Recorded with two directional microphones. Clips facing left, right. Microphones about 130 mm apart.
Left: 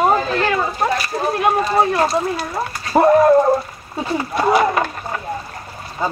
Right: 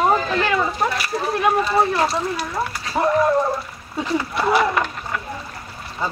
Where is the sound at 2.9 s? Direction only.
50° left (ahead or behind).